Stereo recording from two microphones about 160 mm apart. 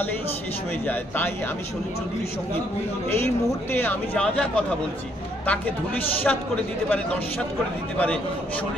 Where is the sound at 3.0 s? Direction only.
15° left (ahead or behind).